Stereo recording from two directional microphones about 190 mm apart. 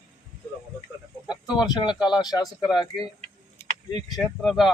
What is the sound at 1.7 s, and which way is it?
Speech, 25° left (ahead or behind).